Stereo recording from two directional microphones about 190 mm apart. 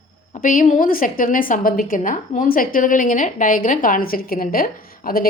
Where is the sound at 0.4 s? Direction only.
45° left (ahead or behind).